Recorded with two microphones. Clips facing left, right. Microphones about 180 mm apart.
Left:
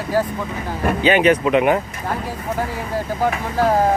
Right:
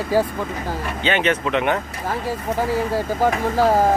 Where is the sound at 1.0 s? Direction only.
10° left (ahead or behind).